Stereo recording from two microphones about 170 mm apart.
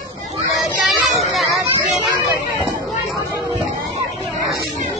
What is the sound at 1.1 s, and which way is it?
Speech, centre (ahead or behind).